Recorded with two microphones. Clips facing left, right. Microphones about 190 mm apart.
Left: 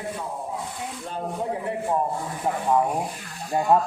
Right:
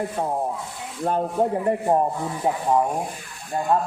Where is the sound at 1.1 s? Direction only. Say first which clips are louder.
Right 12 dB; 55° right (ahead or behind).